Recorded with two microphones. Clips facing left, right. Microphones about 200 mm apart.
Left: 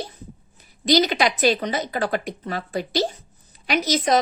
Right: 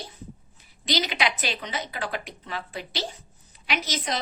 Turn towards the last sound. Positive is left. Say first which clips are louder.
# left 10 dB
turn(degrees=45)  # may be behind; listen again after turning